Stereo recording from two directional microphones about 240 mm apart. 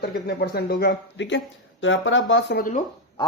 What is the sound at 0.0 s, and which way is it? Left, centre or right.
Speech, left.